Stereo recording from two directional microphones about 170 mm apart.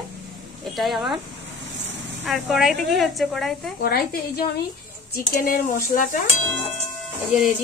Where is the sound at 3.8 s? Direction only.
65° left (ahead or behind).